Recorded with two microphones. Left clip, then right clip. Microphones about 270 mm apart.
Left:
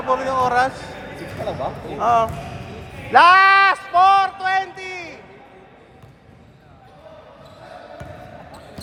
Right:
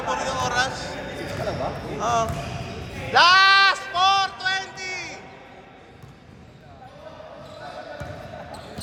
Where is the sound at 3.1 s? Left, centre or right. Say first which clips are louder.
Left 4 dB; left; by 5.1 s centre.